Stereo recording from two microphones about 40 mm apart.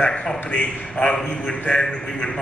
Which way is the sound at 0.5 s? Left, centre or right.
Left.